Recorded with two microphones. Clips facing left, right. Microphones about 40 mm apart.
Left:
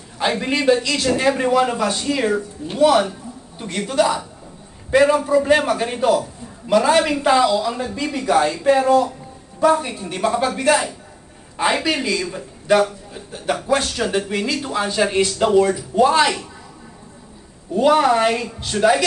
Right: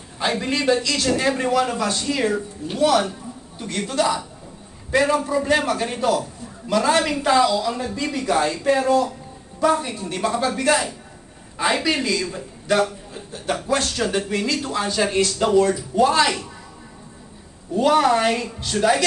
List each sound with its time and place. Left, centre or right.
0.2 s a man's voice: centre
17.7 s a man's voice: centre